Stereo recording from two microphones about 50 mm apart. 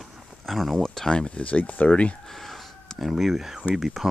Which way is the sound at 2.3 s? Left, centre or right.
Centre.